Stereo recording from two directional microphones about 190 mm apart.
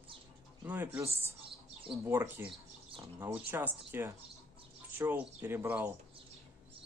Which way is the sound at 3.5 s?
10° right (ahead or behind).